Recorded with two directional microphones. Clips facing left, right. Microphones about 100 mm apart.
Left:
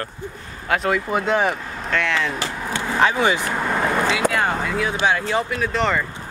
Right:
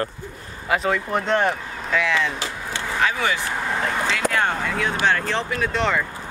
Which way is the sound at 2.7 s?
30° left (ahead or behind).